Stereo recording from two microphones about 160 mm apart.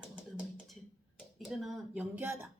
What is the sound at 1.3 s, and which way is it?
Speech, centre (ahead or behind).